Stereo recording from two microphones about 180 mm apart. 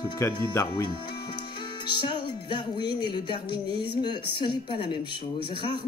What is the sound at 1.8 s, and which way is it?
Music, 25° left (ahead or behind).